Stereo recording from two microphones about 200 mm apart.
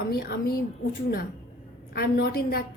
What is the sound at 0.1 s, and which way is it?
Speech, 50° left (ahead or behind).